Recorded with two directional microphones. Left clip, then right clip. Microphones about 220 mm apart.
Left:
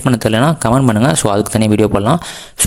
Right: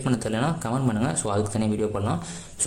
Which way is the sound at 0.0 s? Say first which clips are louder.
Left 13 dB; 40° left (ahead or behind).